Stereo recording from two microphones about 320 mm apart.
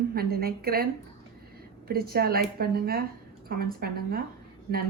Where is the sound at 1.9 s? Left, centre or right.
Right.